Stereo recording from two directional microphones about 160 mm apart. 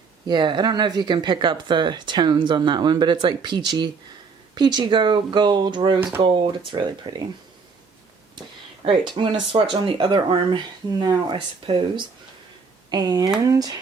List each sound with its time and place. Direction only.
0.3 s speech: 30° right (ahead or behind)
8.8 s speech: 30° right (ahead or behind)